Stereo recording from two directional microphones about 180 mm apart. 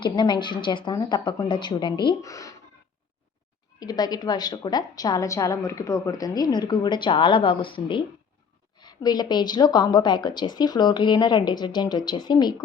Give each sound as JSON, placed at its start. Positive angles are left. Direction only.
{"t": 0.0, "sound": "a woman's voice", "side_deg": 25}
{"t": 3.8, "sound": "a woman's voice", "side_deg": 20}